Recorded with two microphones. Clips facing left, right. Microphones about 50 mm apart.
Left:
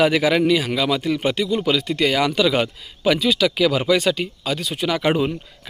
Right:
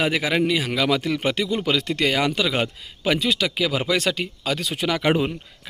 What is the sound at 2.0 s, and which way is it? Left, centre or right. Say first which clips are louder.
Speech: left 5 dB; right.